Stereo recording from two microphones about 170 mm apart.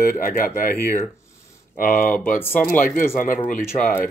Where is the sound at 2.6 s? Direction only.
55° left (ahead or behind).